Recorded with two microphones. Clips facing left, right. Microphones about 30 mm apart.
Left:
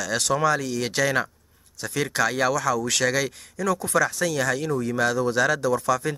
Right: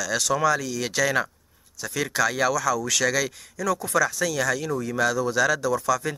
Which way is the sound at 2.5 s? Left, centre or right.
Left.